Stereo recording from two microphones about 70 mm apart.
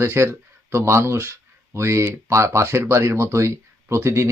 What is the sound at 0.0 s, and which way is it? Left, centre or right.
Speech, right.